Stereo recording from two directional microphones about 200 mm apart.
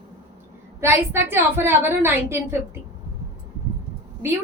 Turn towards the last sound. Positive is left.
turn(degrees=-10)  # may be behind; listen again after turning